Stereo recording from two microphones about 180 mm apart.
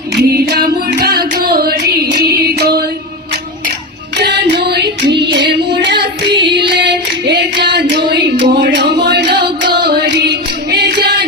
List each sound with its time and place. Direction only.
0.2 s music: 60° right (ahead or behind)
4.5 s music: 65° right (ahead or behind)
5.1 s child singing: 65° right (ahead or behind)
6.6 s singing: 65° right (ahead or behind)
9.4 s female singing: 60° right (ahead or behind)